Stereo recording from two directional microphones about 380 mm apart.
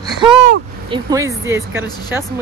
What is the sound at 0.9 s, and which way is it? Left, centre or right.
Speech, centre.